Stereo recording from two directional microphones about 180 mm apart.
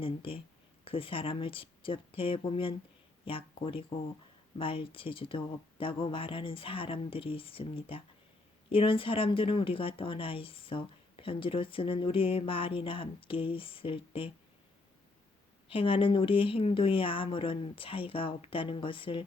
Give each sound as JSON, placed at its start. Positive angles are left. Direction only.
{"t": 0.0, "sound": "speech", "side_deg": 30}
{"t": 15.7, "sound": "speech", "side_deg": 30}